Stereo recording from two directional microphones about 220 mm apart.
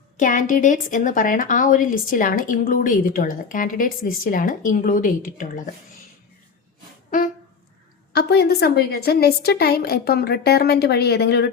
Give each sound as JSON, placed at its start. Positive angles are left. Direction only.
{"t": 0.2, "sound": "a woman's voice", "side_deg": 35}
{"t": 8.1, "sound": "a woman's voice", "side_deg": 45}